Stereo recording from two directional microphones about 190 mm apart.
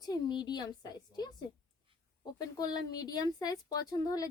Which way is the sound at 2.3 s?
20° left (ahead or behind).